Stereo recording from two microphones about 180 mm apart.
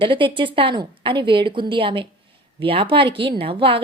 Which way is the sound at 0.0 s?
25° right (ahead or behind).